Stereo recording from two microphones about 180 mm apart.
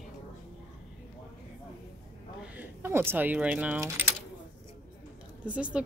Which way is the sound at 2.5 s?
10° right (ahead or behind).